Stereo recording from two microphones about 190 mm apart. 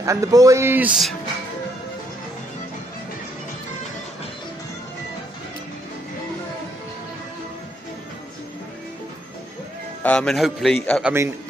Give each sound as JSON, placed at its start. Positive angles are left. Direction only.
{"t": 0.0, "sound": "a man's voice", "side_deg": -15}
{"t": 10.0, "sound": "a man's voice", "side_deg": 5}